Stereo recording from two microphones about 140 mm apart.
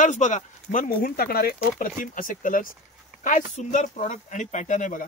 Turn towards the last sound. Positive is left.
turn(degrees=65)  # may be behind; listen again after turning